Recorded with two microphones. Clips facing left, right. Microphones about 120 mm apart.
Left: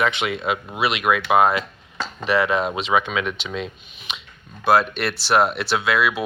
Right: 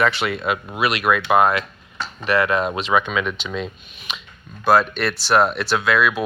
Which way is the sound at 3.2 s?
10° left (ahead or behind).